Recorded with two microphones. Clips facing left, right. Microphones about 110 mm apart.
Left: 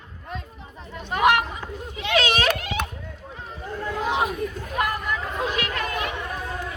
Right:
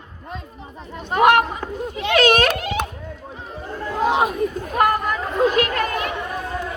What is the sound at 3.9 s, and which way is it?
Chatter, 40° right (ahead or behind).